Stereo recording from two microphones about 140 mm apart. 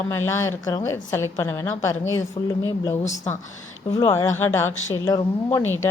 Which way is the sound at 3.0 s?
55° left (ahead or behind).